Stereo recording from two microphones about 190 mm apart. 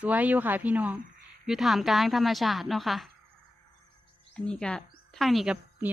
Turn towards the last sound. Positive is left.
turn(degrees=0)  # may be behind; listen again after turning